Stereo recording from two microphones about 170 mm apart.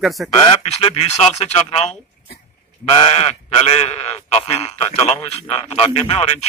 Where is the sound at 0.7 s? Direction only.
35° left (ahead or behind).